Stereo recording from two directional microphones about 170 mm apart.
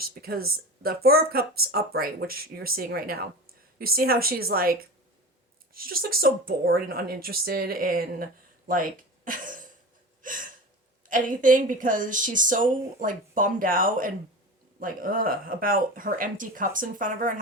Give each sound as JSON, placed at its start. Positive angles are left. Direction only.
{"t": 0.0, "sound": "speech", "side_deg": -60}
{"t": 10.2, "sound": "gasp", "side_deg": -50}
{"t": 11.1, "sound": "a woman's voice", "side_deg": -50}